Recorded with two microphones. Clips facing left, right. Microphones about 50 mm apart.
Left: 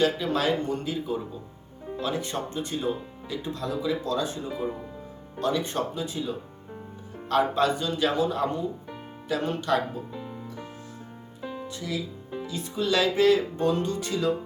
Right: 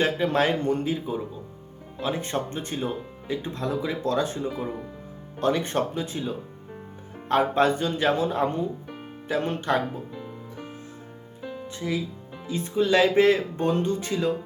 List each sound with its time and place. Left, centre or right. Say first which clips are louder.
0.0 s speech: right 2 dB; right
0.9 s speech: right 2 dB; centre
10.2 s music: left 1 dB; centre
11.4 s music: even; centre
11.8 s speech: right 6 dB; right